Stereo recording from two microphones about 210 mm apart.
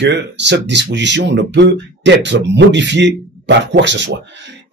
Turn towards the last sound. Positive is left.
turn(degrees=-55)  # may be behind; listen again after turning